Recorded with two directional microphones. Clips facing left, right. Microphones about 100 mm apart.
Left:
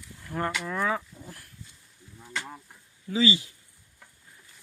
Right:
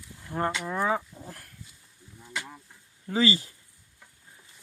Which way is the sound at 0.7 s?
25° right (ahead or behind).